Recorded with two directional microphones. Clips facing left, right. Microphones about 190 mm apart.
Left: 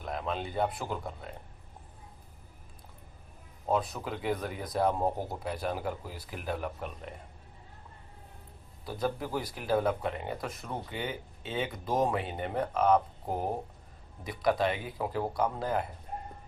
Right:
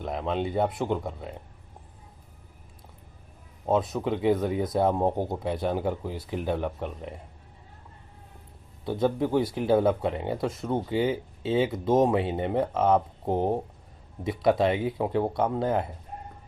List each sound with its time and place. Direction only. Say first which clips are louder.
0.0 s speech: right 6 dB; 25° right (ahead or behind)
3.7 s speech: right 6 dB; 25° right (ahead or behind)
8.8 s speech: right 8 dB; 25° right (ahead or behind)